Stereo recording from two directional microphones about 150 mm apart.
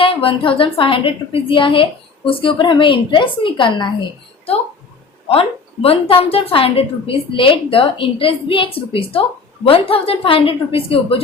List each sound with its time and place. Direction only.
0.0 s a woman's voice: 35° left (ahead or behind)
5.3 s a woman's voice: 40° left (ahead or behind)